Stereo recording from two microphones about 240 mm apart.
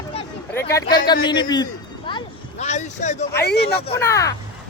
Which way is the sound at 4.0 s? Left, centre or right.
Centre.